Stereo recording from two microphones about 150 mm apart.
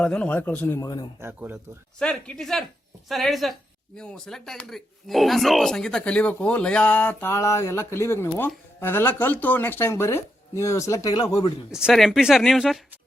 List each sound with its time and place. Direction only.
0.0 s a man's voice: 5° left (ahead or behind)
0.8 s a man's voice: 25° left (ahead or behind)
1.2 s speech: 15° right (ahead or behind)
2.0 s a man's voice: 5° left (ahead or behind); by 11.5 s 25° left (ahead or behind)
11.7 s speech: 5° right (ahead or behind)